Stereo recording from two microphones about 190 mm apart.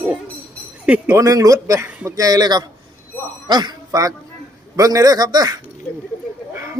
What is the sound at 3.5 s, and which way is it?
Speech, 20° right (ahead or behind).